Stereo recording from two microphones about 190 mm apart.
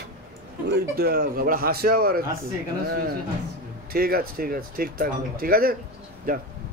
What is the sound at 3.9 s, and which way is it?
Speech, 50° right (ahead or behind).